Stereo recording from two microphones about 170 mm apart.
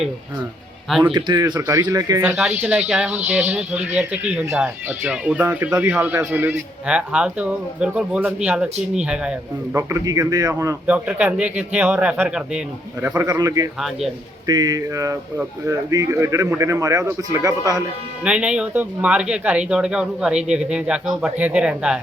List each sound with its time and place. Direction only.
0.9 s speech: centre (ahead or behind)
1.1 s a man's voice: 25° right (ahead or behind); by 9.3 s 5° right (ahead or behind)
9.7 s a man's voice: 20° right (ahead or behind)
13.7 s speech: centre (ahead or behind)
14.4 s a man's voice: 20° right (ahead or behind)
18.2 s speech: 5° right (ahead or behind)